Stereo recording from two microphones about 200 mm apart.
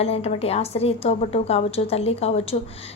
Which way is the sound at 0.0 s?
30° left (ahead or behind).